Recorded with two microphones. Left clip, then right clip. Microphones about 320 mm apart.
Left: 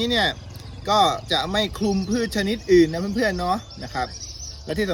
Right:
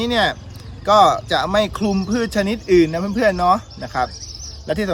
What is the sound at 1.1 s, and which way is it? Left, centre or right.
Speech, centre.